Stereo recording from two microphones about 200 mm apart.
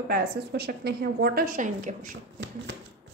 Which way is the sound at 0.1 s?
50° right (ahead or behind).